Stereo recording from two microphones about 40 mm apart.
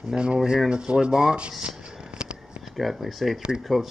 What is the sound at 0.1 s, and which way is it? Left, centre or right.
Speech, right.